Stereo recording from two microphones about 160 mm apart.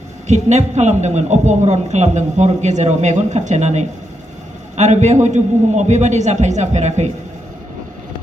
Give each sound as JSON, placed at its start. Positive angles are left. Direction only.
{"t": 0.3, "sound": "a man's voice", "side_deg": -45}